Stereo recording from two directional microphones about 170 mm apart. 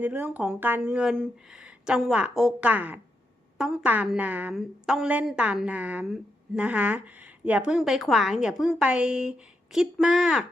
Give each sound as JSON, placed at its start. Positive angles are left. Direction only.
{"t": 0.0, "sound": "a woman's voice", "side_deg": -10}